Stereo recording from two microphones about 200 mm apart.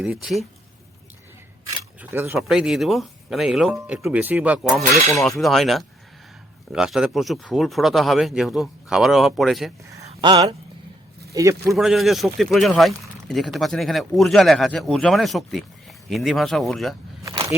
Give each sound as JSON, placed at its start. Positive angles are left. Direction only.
{"t": 0.0, "sound": "speech", "side_deg": -5}
{"t": 2.0, "sound": "speech", "side_deg": -10}
{"t": 10.1, "sound": "a sound", "side_deg": -25}
{"t": 11.3, "sound": "speech", "side_deg": -15}
{"t": 11.8, "sound": "speech", "side_deg": 0}